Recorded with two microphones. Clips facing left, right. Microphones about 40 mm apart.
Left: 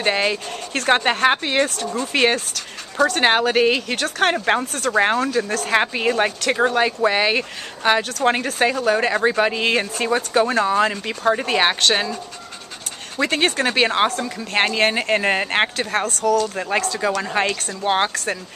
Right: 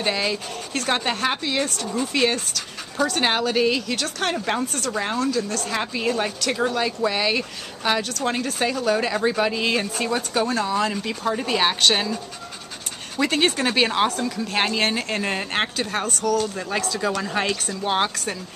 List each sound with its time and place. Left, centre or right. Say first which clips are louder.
0.0 s a woman's voice: left 4 dB; left
11.9 s speech: left 2 dB; centre
13.2 s speech: left 1 dB; centre